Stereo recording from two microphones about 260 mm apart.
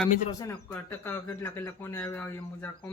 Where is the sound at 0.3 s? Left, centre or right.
Centre.